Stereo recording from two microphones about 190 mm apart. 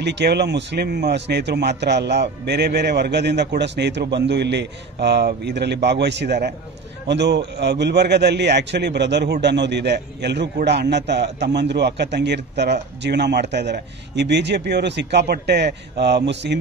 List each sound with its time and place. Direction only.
0.0 s a man's voice: 65° right (ahead or behind)